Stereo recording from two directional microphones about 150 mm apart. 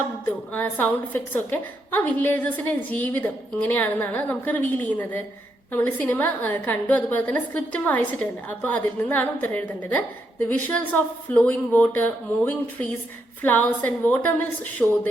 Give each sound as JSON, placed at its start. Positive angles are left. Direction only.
{"t": 0.3, "sound": "a woman's voice", "side_deg": 10}